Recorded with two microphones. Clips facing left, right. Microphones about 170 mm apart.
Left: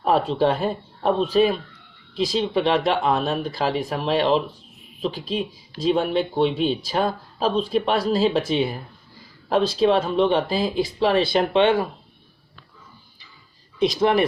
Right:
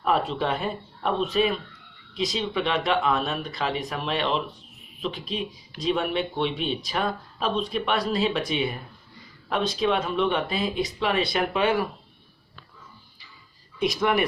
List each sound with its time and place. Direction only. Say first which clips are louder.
0.0 s speech: left 5 dB; 35° left (ahead or behind)
13.7 s speech: left 5 dB; 30° left (ahead or behind)